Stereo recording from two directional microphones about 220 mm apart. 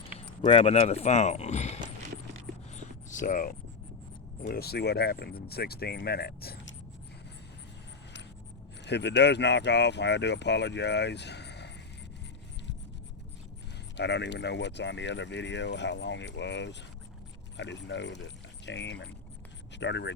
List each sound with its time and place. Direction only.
0.2 s speech: 25° left (ahead or behind)
2.7 s a sound: 35° left (ahead or behind)
4.4 s speech: 45° left (ahead or behind)
8.8 s speech: 50° left (ahead or behind)
13.9 s speech: 50° left (ahead or behind)